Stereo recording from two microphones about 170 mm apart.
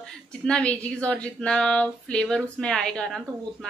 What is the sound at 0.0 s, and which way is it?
Speech, 5° left (ahead or behind).